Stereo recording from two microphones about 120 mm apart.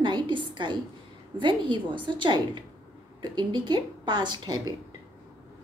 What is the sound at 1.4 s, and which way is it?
A woman's voice, 40° right (ahead or behind).